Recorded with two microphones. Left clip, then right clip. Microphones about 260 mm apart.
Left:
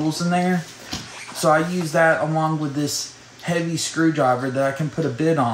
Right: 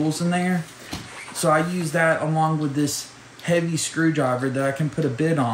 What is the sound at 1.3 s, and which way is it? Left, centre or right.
Speech, centre.